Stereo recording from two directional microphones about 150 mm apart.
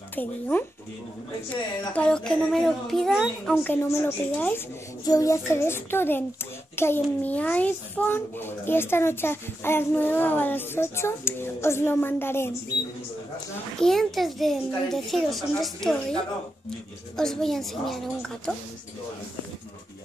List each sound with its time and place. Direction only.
0.1 s a child's voice: 10° left (ahead or behind)
3.5 s a child's voice: 15° left (ahead or behind)
13.7 s a child's voice: centre (ahead or behind)